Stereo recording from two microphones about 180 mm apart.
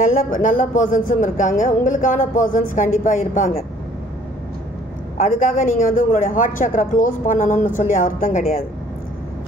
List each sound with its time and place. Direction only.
0.0 s speech: 45° left (ahead or behind)
5.1 s speech: 45° left (ahead or behind)